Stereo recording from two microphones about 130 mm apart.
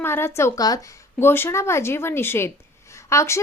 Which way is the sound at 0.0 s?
15° left (ahead or behind).